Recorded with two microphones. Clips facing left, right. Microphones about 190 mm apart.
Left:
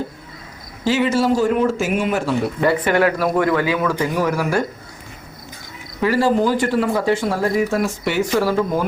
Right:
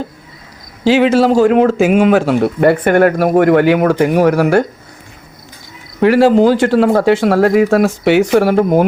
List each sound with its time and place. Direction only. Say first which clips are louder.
0.9 s speech: right 7 dB; 90° right; by 4.6 s 65° right (ahead or behind)
6.0 s speech: right 8 dB; 80° right